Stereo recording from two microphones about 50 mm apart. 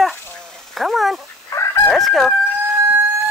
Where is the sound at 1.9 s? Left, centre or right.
Centre.